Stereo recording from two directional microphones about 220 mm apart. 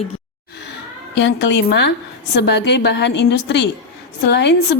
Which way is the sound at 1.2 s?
55° left (ahead or behind).